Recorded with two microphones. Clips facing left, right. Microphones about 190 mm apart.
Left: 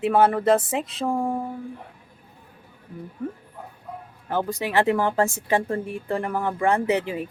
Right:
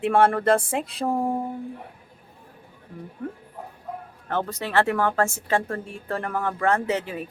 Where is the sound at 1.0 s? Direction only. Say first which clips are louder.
Right 1 dB; 20° right (ahead or behind).